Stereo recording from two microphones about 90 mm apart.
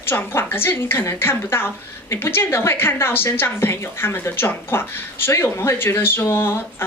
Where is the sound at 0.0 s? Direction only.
25° left (ahead or behind).